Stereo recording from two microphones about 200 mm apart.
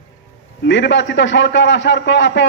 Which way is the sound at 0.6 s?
65° left (ahead or behind).